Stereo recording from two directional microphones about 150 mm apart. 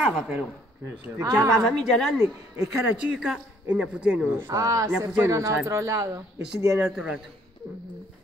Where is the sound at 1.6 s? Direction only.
5° left (ahead or behind).